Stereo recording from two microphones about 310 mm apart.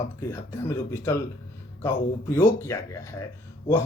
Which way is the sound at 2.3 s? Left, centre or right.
Centre.